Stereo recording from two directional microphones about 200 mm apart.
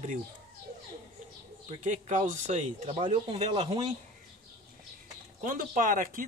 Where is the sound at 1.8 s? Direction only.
35° right (ahead or behind).